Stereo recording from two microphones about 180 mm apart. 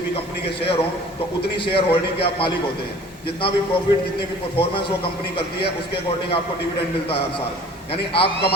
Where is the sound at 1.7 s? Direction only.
30° left (ahead or behind).